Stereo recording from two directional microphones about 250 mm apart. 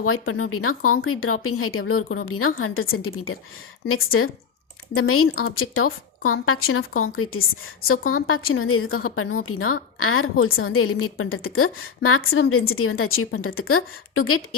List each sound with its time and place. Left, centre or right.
0.0 s a woman's voice: left